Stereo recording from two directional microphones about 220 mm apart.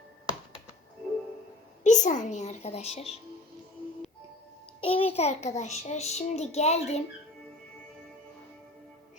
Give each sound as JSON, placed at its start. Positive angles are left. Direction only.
{"t": 1.8, "sound": "a child's voice", "side_deg": 35}
{"t": 4.8, "sound": "child singing", "side_deg": 25}